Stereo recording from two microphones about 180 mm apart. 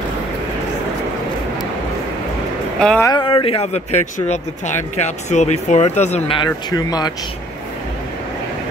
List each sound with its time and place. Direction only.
2.8 s speech: 5° left (ahead or behind)
3.1 s speech: 25° left (ahead or behind)